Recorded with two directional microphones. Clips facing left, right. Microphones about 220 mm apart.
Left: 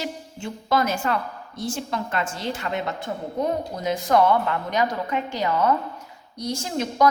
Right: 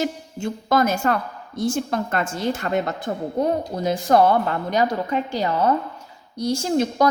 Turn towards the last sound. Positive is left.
turn(degrees=-35)  # may be behind; listen again after turning